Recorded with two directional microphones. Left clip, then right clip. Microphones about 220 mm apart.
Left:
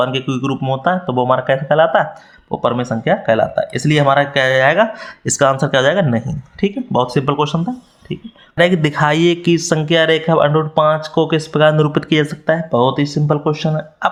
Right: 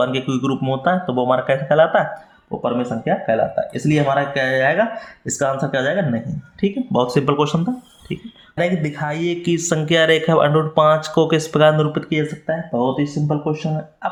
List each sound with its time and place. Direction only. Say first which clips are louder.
0.0 s speech: left 2 dB; 20° left (ahead or behind)
2.5 s speech: left 4 dB; 40° left (ahead or behind); by 7.7 s 15° left (ahead or behind)
8.5 s speech: left 7 dB; 35° left (ahead or behind); by 11.9 s 15° left (ahead or behind)
11.9 s speech: left 6 dB; 35° left (ahead or behind)